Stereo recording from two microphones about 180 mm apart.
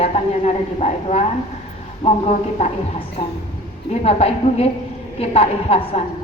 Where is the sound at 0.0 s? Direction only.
35° left (ahead or behind).